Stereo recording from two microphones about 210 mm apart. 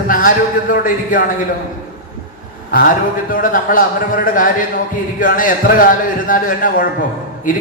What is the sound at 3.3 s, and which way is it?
A man's voice, 40° left (ahead or behind).